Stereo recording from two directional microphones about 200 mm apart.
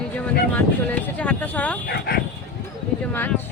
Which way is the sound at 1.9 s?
50° left (ahead or behind).